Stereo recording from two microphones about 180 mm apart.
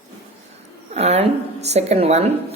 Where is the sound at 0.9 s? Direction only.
35° right (ahead or behind).